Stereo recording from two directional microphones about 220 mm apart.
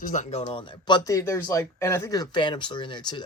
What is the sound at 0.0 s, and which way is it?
Speech, 35° left (ahead or behind).